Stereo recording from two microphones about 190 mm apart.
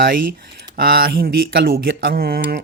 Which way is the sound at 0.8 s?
55° right (ahead or behind).